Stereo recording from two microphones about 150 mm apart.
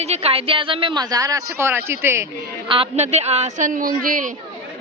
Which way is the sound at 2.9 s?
45° right (ahead or behind).